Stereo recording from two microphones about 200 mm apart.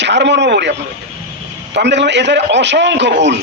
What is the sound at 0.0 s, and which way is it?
A man's voice, 60° right (ahead or behind).